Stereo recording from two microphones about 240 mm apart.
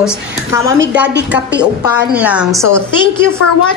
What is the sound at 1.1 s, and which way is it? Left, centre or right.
Speech, right.